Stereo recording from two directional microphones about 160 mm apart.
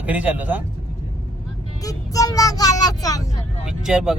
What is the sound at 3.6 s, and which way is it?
Speech, 5° right (ahead or behind).